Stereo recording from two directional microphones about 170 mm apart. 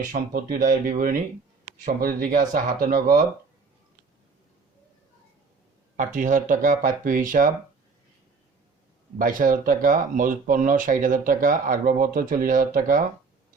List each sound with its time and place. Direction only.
0.1 s speech: 55° right (ahead or behind)
6.0 s speech: 50° right (ahead or behind)
9.1 s speech: 50° right (ahead or behind)